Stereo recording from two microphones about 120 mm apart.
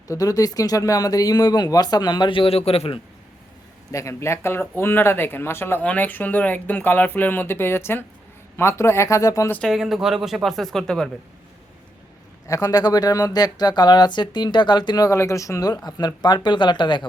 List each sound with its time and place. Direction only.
0.1 s speech: 30° left (ahead or behind); by 3.0 s 55° left (ahead or behind)
3.9 s speech: 25° left (ahead or behind)
9.6 s speech: centre (ahead or behind)
12.5 s speech: 30° left (ahead or behind)